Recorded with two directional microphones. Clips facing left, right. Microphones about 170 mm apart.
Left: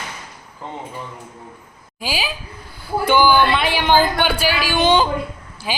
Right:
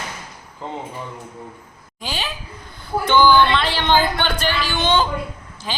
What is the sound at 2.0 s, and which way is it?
A woman's voice, 5° left (ahead or behind).